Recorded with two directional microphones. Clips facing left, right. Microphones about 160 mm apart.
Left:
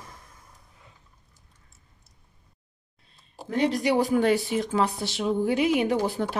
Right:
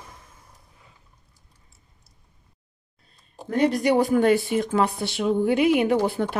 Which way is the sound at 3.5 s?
50° right (ahead or behind).